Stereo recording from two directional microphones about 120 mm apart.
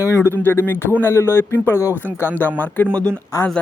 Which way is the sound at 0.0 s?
25° left (ahead or behind).